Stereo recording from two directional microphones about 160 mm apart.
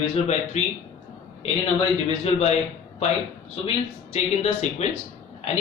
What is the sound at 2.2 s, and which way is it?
Speech, 40° left (ahead or behind).